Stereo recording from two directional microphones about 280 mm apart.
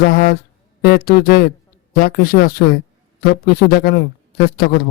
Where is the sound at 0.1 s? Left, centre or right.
Left.